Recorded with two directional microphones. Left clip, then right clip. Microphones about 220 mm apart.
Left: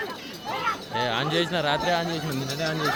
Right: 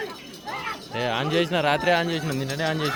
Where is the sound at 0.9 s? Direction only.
25° right (ahead or behind).